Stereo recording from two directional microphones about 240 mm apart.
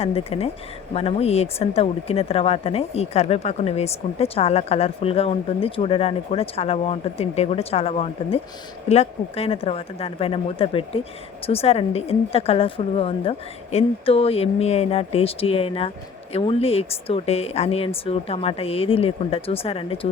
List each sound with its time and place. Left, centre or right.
0.0 s speech: left